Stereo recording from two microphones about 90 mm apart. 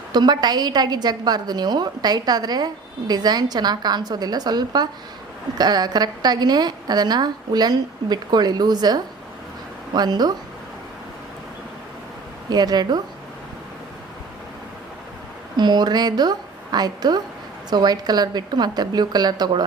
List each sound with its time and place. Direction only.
0.1 s a woman's voice: 50° right (ahead or behind)
12.5 s a woman's voice: 50° right (ahead or behind)
15.5 s a woman's voice: 55° right (ahead or behind)